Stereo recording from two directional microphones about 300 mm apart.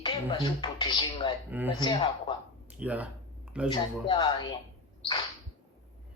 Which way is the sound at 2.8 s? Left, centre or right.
Centre.